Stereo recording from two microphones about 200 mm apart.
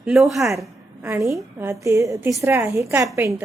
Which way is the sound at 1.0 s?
15° right (ahead or behind).